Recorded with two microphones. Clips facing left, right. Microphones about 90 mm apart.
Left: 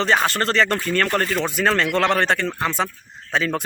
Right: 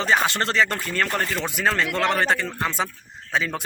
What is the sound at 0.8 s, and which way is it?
A man's voice, 5° right (ahead or behind).